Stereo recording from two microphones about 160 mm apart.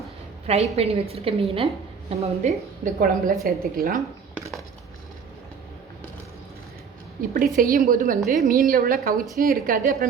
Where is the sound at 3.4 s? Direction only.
70° right (ahead or behind).